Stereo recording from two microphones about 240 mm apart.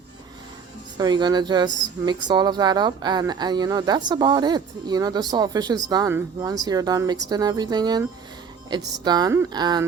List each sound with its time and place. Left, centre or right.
0.9 s speech: centre